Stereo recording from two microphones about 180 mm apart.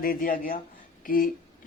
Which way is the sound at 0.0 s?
50° left (ahead or behind).